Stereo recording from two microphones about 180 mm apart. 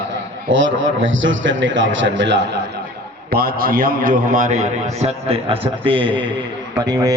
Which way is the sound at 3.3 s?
55° right (ahead or behind).